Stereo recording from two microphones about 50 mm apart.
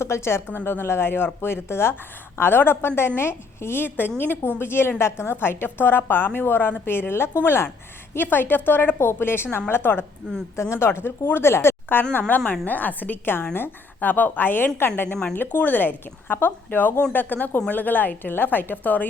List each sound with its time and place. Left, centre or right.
0.0 s speech: left
0.5 s a woman's voice: left
9.0 s a woman's voice: left
10.6 s a woman's voice: left
12.5 s a woman's voice: left
15.4 s speech: left